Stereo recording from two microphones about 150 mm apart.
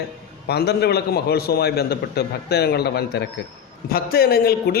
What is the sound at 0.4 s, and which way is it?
A man's voice, 90° left.